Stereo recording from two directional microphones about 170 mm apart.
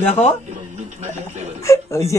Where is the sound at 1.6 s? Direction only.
15° left (ahead or behind).